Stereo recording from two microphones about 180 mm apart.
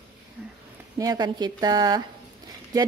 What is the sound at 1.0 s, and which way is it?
A woman's voice, 20° right (ahead or behind).